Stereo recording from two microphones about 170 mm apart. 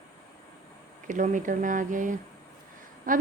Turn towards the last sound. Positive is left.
turn(degrees=-55)  # may be behind; listen again after turning